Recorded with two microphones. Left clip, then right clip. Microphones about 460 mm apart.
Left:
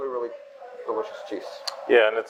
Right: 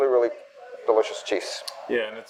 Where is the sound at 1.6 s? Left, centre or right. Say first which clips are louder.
Left 8 dB; left.